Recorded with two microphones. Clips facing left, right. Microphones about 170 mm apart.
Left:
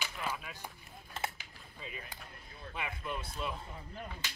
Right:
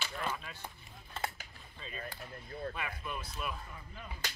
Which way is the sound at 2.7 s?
20° left (ahead or behind).